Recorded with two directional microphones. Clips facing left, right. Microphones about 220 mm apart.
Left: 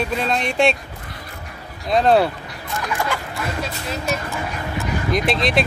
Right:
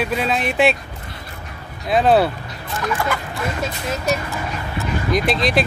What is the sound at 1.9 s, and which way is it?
Speech, 5° right (ahead or behind).